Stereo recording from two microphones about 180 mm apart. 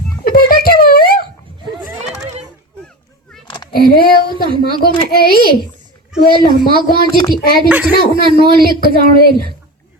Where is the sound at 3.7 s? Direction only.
55° left (ahead or behind).